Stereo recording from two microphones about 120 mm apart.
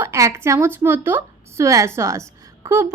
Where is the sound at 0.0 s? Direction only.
20° right (ahead or behind).